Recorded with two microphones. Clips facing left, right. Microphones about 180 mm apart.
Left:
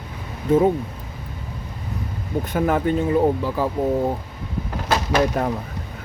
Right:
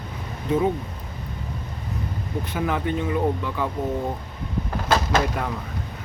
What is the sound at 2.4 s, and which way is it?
Speech, 45° left (ahead or behind).